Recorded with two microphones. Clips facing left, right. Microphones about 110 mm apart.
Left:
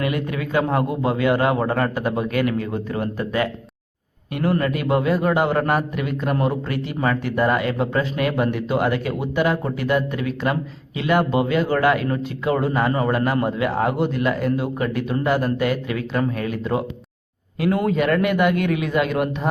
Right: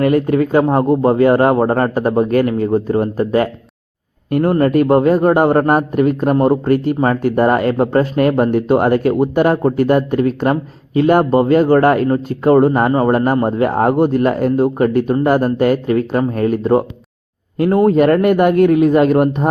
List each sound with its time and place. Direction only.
0.0 s a man's voice: 40° right (ahead or behind)
17.8 s speech: 45° right (ahead or behind)